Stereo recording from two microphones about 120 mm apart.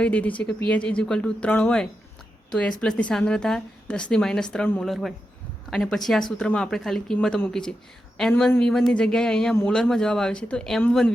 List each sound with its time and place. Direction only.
0.0 s a woman's voice: 10° left (ahead or behind)
4.9 s speech: centre (ahead or behind)